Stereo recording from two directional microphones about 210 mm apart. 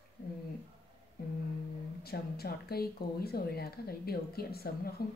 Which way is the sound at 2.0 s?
50° left (ahead or behind).